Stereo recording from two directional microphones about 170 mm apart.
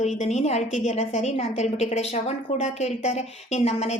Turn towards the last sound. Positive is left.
turn(degrees=40)  # may be behind; listen again after turning